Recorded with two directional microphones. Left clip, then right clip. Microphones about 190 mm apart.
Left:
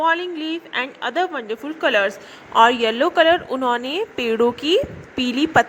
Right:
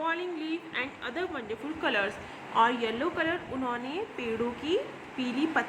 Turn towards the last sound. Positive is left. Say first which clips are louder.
# left 12 dB
turn(degrees=35)  # may be behind; listen again after turning